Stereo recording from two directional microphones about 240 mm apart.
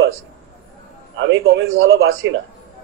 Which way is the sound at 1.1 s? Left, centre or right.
Right.